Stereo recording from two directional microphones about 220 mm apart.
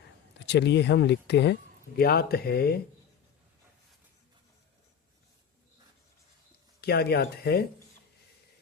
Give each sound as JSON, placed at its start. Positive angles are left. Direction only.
{"t": 0.4, "sound": "speech", "side_deg": 50}
{"t": 6.8, "sound": "speech", "side_deg": 45}